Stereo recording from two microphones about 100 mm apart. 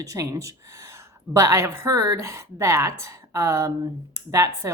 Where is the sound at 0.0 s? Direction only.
30° right (ahead or behind).